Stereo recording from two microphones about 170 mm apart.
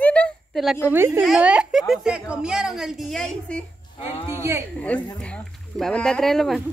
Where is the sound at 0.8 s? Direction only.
15° right (ahead or behind); by 3.6 s 5° left (ahead or behind).